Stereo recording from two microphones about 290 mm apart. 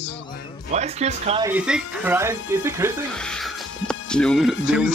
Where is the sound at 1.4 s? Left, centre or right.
Centre.